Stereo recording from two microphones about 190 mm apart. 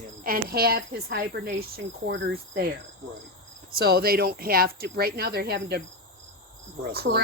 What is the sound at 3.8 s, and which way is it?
Speech, 55° right (ahead or behind).